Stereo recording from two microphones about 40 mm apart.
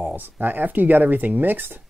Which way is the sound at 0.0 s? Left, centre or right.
Right.